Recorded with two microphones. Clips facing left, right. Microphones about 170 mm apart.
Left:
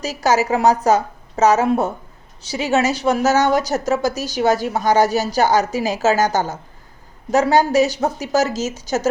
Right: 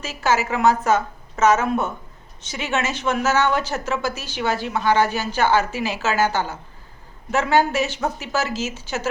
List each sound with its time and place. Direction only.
0.0 s a woman's voice: 40° left (ahead or behind)